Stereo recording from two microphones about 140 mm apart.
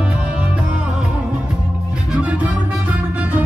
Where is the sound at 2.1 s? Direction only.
10° right (ahead or behind).